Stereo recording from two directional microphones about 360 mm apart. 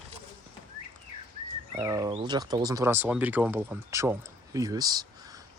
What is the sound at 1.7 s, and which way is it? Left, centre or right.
Speech, centre.